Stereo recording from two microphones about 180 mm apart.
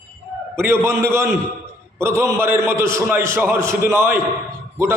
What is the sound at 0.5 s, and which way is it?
A man's voice, 15° right (ahead or behind).